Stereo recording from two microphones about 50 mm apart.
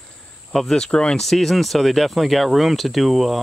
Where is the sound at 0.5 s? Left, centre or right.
Centre.